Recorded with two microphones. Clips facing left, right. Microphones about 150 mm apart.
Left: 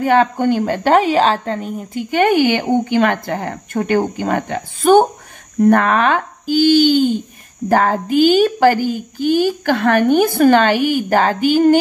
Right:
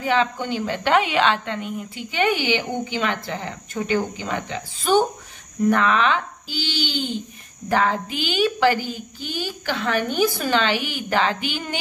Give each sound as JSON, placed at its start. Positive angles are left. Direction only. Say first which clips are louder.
{"t": 0.0, "sound": "a woman's voice", "louder": "left 8 dB", "side_deg": 50}